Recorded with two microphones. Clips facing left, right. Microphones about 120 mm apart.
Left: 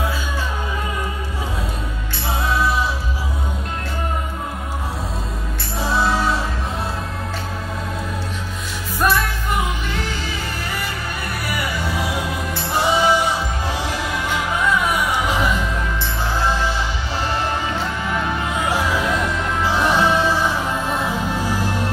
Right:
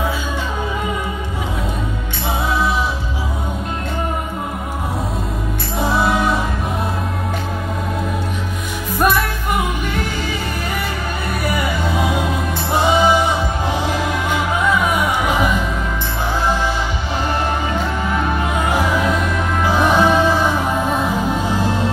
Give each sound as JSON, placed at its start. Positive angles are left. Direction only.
{"t": 11.5, "sound": "music", "side_deg": -20}
{"t": 18.4, "sound": "music", "side_deg": -15}